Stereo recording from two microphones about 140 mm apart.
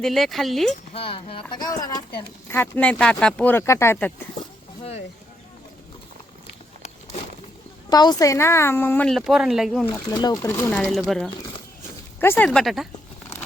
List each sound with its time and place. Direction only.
0.0 s speech: centre (ahead or behind)
0.9 s speech: 40° left (ahead or behind)
2.5 s speech: 15° left (ahead or behind)
4.8 s speech: 50° left (ahead or behind)
7.9 s a woman's voice: 30° left (ahead or behind)
9.0 s speech: centre (ahead or behind)
10.1 s a woman's voice: 30° left (ahead or behind)
10.3 s a woman's voice: 20° left (ahead or behind)
10.7 s speech: 5° left (ahead or behind)
12.2 s speech: 15° left (ahead or behind)
12.5 s speech: centre (ahead or behind)